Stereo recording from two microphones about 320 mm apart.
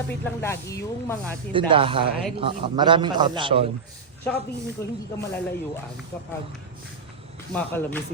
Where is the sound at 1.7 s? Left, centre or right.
Centre.